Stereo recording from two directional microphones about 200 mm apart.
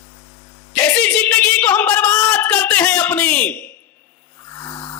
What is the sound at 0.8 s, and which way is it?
Speech, 10° left (ahead or behind).